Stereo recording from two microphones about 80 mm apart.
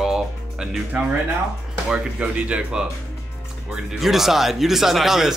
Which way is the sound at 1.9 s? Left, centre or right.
Centre.